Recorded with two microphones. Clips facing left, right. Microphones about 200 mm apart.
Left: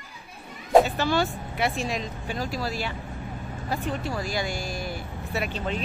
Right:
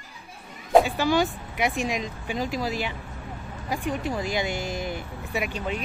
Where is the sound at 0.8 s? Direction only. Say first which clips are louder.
Right 2 dB; 15° right (ahead or behind).